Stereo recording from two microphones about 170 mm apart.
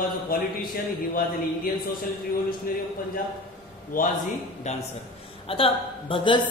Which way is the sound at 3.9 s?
55° left (ahead or behind).